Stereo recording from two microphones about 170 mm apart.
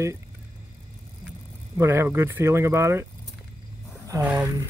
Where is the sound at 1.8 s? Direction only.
15° right (ahead or behind).